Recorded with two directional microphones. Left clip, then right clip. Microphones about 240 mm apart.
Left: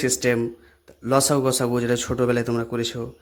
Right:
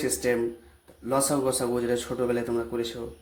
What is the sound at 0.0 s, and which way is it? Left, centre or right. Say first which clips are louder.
Speech: left 4 dB; left.